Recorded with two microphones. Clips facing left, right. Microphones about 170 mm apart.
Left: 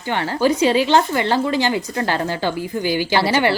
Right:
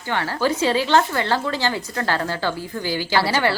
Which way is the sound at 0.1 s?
15° left (ahead or behind).